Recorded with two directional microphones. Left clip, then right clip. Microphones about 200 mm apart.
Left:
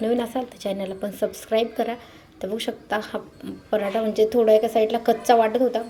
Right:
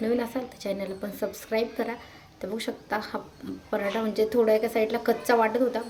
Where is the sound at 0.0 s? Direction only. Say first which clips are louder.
Left 4 dB; 15° left (ahead or behind).